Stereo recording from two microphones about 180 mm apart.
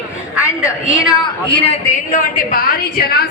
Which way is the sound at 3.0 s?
60° left (ahead or behind).